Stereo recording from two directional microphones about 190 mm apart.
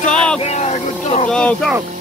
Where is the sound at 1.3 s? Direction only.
5° left (ahead or behind).